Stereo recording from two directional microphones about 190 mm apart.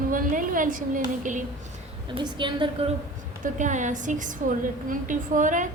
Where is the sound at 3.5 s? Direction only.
40° right (ahead or behind).